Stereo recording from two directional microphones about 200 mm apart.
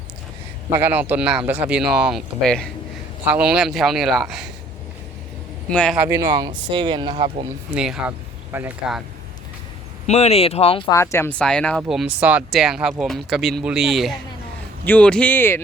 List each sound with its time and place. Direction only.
0.8 s speech: 10° right (ahead or behind)
5.7 s speech: 5° left (ahead or behind)
6.0 s speech: 15° right (ahead or behind)
7.8 s speech: 5° right (ahead or behind)
10.1 s speech: 30° left (ahead or behind)
10.9 s speech: 15° left (ahead or behind)